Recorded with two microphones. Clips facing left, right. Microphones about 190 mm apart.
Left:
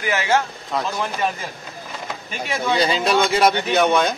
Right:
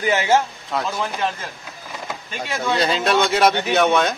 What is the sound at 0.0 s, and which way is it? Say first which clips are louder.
Speech: right 2 dB; 25° right (ahead or behind).